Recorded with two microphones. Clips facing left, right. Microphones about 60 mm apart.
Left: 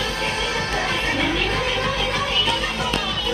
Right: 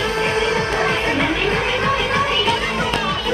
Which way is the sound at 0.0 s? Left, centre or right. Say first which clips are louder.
Right 6 dB; right.